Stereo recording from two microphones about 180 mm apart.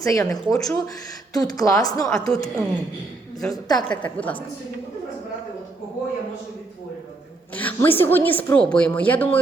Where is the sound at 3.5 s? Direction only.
20° left (ahead or behind).